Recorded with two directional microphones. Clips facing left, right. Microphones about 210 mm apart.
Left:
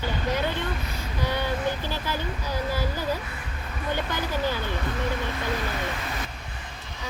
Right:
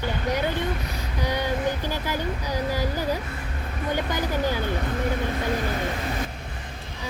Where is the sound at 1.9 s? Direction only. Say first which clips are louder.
Right 2 dB; 15° right (ahead or behind).